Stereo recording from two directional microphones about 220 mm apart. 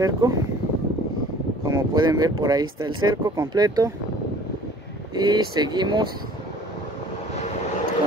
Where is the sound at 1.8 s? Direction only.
20° right (ahead or behind).